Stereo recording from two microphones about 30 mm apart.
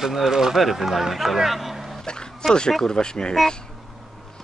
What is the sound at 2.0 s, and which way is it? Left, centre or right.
Bow-wow, left.